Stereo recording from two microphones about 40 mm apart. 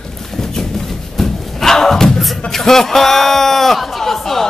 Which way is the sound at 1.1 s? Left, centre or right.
Centre.